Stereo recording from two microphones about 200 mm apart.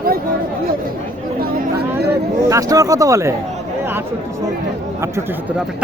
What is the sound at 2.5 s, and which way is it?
Speech, 15° right (ahead or behind).